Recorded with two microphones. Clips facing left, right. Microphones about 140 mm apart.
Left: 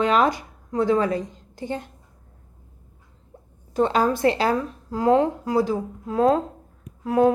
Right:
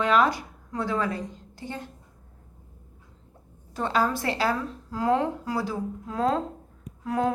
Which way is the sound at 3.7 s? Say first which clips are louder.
Left 5 dB; 20° left (ahead or behind).